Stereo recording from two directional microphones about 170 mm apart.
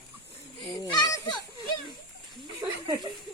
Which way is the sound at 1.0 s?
20° left (ahead or behind).